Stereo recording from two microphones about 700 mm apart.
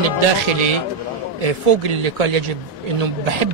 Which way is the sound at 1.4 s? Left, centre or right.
Right.